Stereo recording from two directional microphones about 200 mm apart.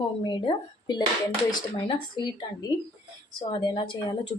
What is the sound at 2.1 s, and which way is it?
A woman's voice, 20° left (ahead or behind).